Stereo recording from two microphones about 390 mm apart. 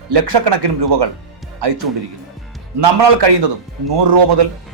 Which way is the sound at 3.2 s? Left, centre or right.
Right.